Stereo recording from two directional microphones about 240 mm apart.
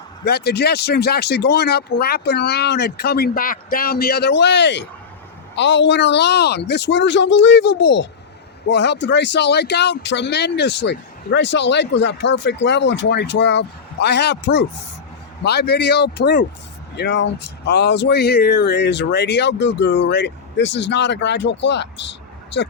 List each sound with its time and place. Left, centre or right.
0.3 s speech: left